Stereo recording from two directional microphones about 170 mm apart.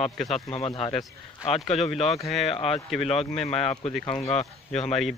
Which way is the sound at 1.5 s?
Centre (ahead or behind).